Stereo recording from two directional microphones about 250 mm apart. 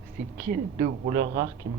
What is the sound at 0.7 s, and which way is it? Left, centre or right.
Speech, right.